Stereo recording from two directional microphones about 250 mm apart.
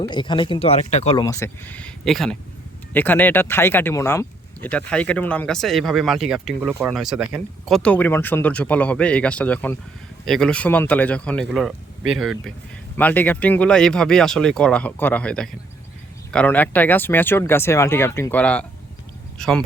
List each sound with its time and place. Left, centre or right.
0.1 s speech: centre